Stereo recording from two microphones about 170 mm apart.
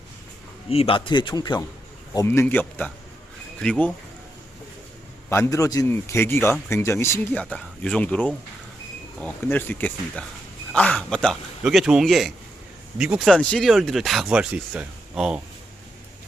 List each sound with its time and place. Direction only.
0.7 s speech: 35° left (ahead or behind); by 3.9 s 5° left (ahead or behind)
5.3 s speech: 15° left (ahead or behind); by 15.4 s 5° right (ahead or behind)